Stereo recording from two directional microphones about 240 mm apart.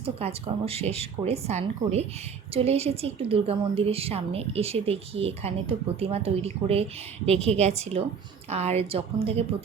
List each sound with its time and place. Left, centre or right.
0.0 s a woman's voice: right